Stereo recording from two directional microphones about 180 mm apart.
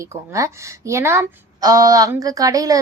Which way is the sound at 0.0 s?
15° right (ahead or behind).